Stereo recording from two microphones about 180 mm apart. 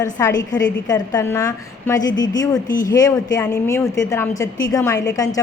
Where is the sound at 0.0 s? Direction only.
15° left (ahead or behind).